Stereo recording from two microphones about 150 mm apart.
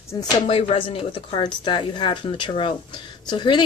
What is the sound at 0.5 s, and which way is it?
Speech, 40° left (ahead or behind).